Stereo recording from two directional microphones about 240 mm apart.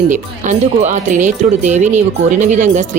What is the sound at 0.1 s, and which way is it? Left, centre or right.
Speech, right.